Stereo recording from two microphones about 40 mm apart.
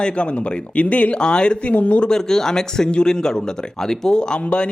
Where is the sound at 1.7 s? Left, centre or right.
Left.